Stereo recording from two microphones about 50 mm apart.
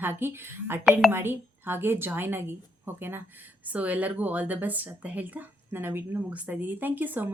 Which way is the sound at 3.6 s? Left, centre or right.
Right.